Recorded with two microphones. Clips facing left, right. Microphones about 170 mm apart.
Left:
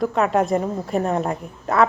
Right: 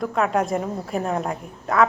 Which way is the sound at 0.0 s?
Centre (ahead or behind).